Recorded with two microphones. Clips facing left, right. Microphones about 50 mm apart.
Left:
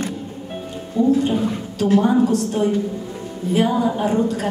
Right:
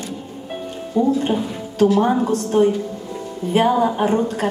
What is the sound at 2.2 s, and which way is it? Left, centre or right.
A woman's voice, right.